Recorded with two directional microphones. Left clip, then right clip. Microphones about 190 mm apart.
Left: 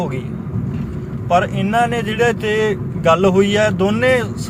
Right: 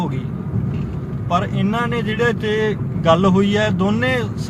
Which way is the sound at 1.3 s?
15° right (ahead or behind).